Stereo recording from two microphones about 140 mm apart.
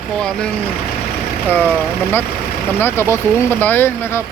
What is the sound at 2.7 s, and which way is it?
Speech, 15° left (ahead or behind).